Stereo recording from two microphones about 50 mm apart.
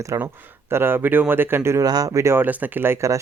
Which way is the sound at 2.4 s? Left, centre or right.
Right.